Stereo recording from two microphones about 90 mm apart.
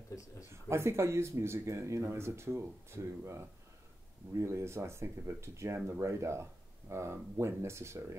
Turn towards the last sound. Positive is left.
turn(degrees=-30)  # may be behind; listen again after turning